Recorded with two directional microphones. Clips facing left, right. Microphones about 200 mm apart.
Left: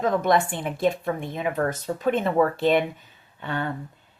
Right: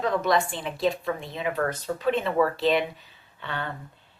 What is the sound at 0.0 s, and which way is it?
Speech, 50° left (ahead or behind).